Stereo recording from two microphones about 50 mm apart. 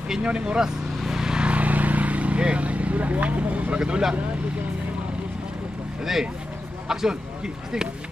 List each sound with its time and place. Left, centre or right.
0.1 s speech: centre
1.0 s vehicle: centre
6.9 s speech: centre